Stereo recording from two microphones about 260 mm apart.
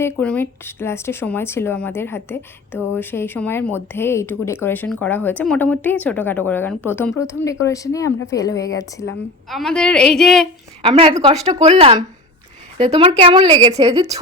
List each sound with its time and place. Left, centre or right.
0.0 s speech: centre
9.5 s a woman's voice: centre
10.8 s a woman's voice: right